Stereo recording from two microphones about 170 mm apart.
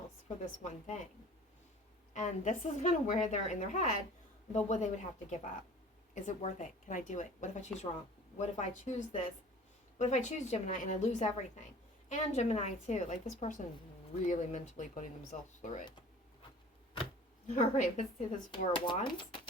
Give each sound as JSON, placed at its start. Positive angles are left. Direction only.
{"t": 0.6, "sound": "speech", "side_deg": 45}
{"t": 2.1, "sound": "speech", "side_deg": 45}
{"t": 17.5, "sound": "speech", "side_deg": 45}
{"t": 18.7, "sound": "speech", "side_deg": 30}